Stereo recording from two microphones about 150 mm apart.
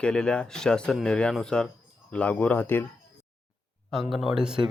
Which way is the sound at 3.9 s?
Centre (ahead or behind).